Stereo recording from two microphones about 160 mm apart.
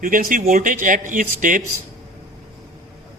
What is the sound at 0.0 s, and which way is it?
Speech, 60° right (ahead or behind).